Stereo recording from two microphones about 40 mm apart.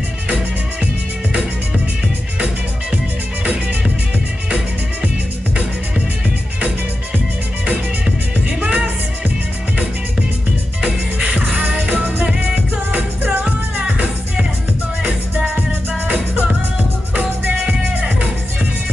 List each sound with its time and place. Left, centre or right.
8.5 s music: right
10.8 s music: right
17.1 s music: right